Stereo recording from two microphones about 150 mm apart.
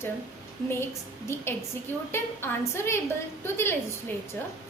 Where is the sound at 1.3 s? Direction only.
15° left (ahead or behind).